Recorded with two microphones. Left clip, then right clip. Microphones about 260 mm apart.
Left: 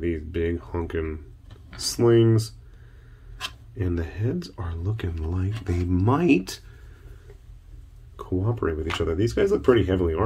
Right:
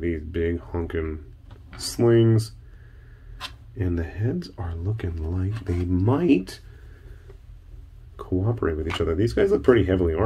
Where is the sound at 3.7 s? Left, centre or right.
Centre.